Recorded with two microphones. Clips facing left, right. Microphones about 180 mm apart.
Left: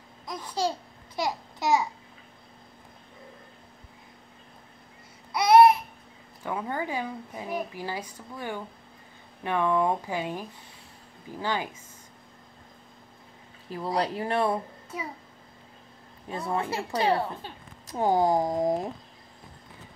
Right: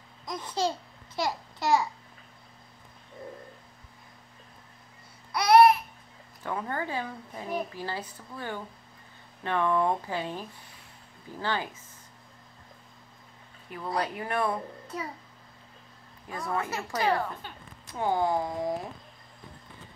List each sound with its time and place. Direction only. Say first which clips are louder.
0.3 s babbling: even; 10° left (ahead or behind)
5.3 s babbling: left 2 dB; 20° left (ahead or behind)
6.4 s a woman's voice: left 1 dB; 15° left (ahead or behind)
13.9 s a woman's voice: left 3 dB; 30° left (ahead or behind)
16.3 s a woman's voice: left 2 dB; 25° left (ahead or behind); by 18.9 s 45° left (ahead or behind)